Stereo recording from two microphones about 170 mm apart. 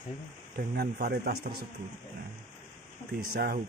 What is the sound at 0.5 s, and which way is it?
Speech, 70° right (ahead or behind).